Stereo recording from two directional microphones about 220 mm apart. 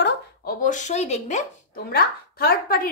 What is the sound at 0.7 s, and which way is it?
Speech, 35° left (ahead or behind).